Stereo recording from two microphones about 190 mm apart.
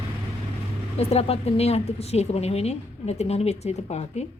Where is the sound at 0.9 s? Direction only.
35° left (ahead or behind).